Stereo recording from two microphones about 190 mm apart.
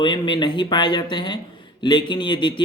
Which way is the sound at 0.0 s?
25° left (ahead or behind).